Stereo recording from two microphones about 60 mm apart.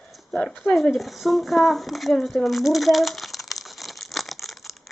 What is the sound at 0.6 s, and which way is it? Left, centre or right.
Speech, centre.